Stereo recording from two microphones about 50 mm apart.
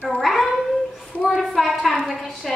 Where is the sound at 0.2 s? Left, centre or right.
Centre.